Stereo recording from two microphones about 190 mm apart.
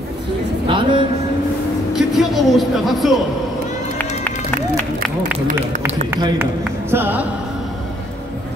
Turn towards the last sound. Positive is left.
turn(degrees=-10)  # may be behind; listen again after turning